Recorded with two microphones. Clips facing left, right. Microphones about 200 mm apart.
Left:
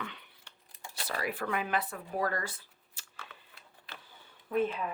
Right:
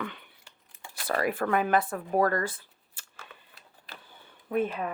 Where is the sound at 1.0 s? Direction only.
55° right (ahead or behind).